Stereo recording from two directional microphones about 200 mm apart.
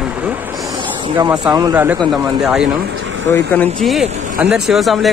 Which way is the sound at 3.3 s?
10° left (ahead or behind).